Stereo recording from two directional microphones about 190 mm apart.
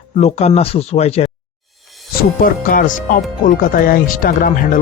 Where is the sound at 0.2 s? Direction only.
35° left (ahead or behind).